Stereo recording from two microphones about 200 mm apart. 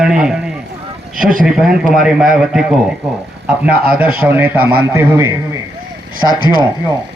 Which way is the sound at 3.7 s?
5° right (ahead or behind).